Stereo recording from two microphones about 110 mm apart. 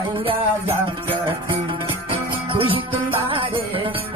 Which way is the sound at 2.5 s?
55° right (ahead or behind).